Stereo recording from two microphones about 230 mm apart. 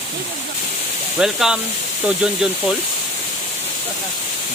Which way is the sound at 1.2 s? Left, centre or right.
Centre.